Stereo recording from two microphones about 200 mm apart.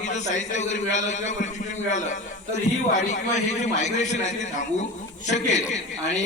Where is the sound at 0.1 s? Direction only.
35° left (ahead or behind).